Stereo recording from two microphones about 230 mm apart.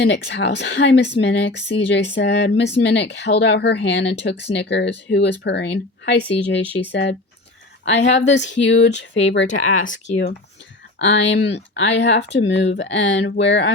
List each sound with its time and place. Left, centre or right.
0.0 s speech: left
9.6 s speech: left
11.0 s speech: left